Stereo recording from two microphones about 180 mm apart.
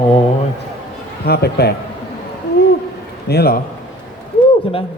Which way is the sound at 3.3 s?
60° left (ahead or behind).